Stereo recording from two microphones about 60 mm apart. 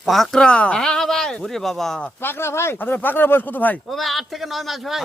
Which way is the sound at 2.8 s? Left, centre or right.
Left.